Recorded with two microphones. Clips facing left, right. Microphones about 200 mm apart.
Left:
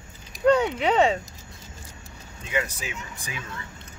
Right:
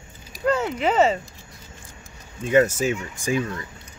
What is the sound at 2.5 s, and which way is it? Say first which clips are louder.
Speech: right 12 dB; 45° right (ahead or behind).